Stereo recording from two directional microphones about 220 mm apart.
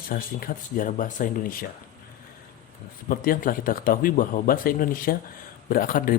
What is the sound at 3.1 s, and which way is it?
Speech, 40° left (ahead or behind).